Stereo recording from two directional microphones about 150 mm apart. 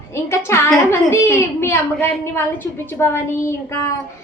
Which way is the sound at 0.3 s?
15° left (ahead or behind).